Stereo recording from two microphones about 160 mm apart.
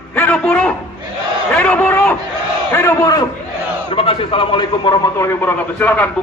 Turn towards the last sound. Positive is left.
turn(degrees=10)  # may be behind; listen again after turning